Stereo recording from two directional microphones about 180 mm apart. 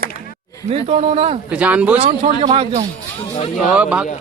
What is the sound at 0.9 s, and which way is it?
Speech, 35° right (ahead or behind).